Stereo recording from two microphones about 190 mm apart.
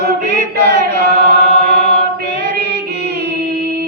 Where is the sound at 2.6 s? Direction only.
35° left (ahead or behind).